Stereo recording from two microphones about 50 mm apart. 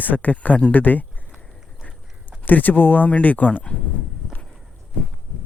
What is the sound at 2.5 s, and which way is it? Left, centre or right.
Speech, left.